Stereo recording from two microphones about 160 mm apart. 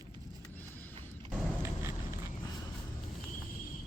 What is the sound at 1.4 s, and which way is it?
Mechanisms, 15° right (ahead or behind).